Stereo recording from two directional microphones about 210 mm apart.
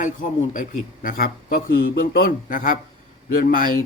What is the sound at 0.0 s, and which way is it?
Speech, 40° left (ahead or behind).